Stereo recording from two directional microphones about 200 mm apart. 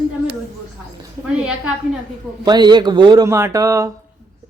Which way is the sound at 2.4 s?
20° right (ahead or behind).